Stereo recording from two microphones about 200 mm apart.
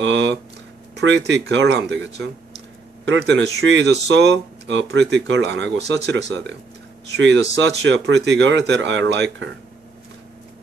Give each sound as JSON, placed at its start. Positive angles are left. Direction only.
{"t": 0.0, "sound": "a sound", "side_deg": -65}
{"t": 0.9, "sound": "speech", "side_deg": -60}
{"t": 7.2, "sound": "speech", "side_deg": -65}